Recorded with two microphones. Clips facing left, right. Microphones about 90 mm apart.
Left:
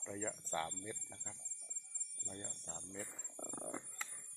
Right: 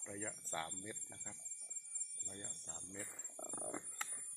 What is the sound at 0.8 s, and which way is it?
Speech, 10° right (ahead or behind).